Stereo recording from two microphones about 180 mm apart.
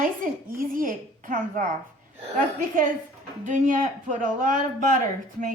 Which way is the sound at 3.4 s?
45° right (ahead or behind).